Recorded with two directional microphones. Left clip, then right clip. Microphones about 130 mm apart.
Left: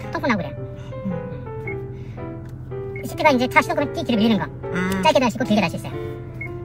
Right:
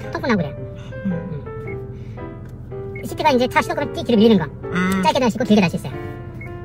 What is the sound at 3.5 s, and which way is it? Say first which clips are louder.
Speech: left 1 dB; 40° right (ahead or behind).